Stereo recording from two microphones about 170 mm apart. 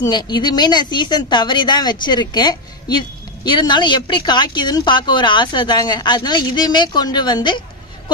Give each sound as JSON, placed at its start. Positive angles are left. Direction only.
{"t": 0.0, "sound": "speech", "side_deg": 25}